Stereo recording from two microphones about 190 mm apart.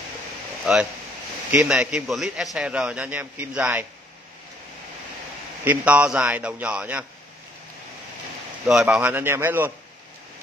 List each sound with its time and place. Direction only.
0.7 s a man's voice: 5° right (ahead or behind)
5.6 s a man's voice: 10° right (ahead or behind)
8.6 s a man's voice: 5° right (ahead or behind)